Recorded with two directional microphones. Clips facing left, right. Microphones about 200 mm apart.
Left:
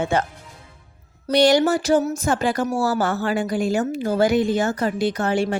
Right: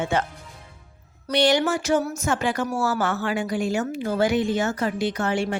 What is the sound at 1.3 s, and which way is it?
Speech, 40° left (ahead or behind).